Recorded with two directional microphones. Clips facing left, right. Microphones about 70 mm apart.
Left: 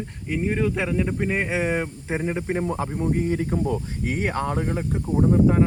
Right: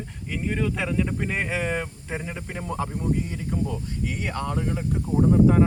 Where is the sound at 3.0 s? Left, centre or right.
Left.